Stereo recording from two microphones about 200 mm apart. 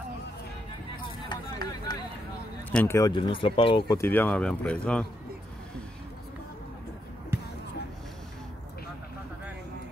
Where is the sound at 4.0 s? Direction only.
10° left (ahead or behind).